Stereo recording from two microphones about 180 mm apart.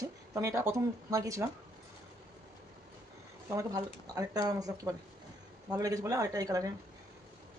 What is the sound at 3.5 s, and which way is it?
Speech, 20° right (ahead or behind).